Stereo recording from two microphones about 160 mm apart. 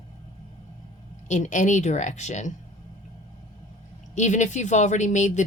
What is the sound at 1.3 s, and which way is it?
Speech, 50° left (ahead or behind).